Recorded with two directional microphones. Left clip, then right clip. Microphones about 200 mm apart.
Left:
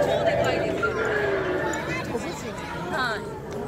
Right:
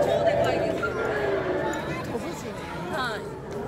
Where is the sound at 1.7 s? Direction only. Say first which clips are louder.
Left 2 dB; 40° right (ahead or behind).